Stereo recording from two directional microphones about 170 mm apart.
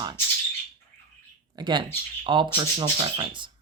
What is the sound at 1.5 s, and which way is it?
Speech, 25° right (ahead or behind).